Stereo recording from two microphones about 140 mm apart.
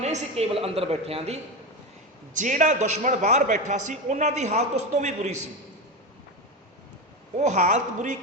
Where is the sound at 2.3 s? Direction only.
65° right (ahead or behind).